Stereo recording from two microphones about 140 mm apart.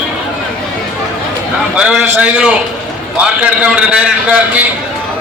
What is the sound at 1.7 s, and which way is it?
A man's voice, 5° right (ahead or behind).